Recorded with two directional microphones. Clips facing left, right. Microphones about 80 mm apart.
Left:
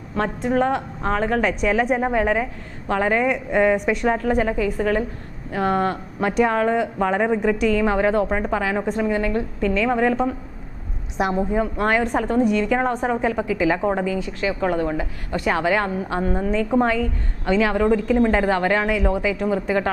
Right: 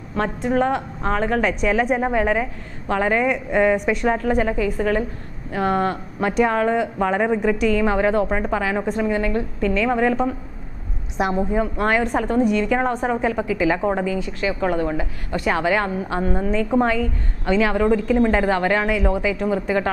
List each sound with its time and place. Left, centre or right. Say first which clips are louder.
0.1 s a woman's voice: even; centre